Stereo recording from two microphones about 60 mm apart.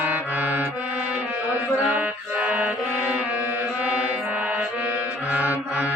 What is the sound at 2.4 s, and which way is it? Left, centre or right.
Music, right.